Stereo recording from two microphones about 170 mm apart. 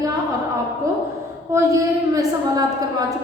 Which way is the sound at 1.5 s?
20° right (ahead or behind).